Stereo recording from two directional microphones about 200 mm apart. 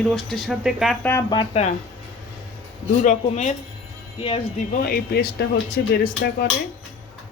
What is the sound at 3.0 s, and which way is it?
Speech, 40° left (ahead or behind).